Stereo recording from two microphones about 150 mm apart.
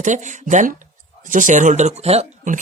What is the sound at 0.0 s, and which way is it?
Speech, 55° right (ahead or behind).